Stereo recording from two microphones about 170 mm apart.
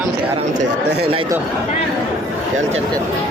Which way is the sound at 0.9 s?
70° right (ahead or behind).